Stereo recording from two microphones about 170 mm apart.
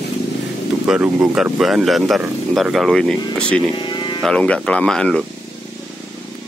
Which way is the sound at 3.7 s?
25° left (ahead or behind).